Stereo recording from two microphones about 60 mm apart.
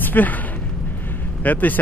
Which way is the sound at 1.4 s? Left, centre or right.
Left.